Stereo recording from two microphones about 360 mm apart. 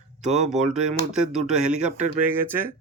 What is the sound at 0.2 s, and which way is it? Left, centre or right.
Speech, centre.